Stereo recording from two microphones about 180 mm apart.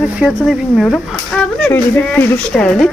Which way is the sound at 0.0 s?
Centre (ahead or behind).